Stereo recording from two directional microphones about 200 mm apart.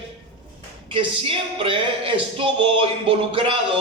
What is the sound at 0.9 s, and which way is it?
Music, 25° right (ahead or behind).